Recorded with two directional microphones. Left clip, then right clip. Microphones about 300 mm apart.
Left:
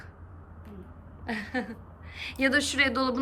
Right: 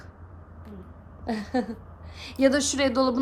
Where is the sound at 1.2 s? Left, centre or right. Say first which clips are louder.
Right 4 dB; centre.